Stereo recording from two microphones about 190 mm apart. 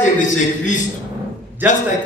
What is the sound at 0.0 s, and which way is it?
A man's voice, 40° left (ahead or behind).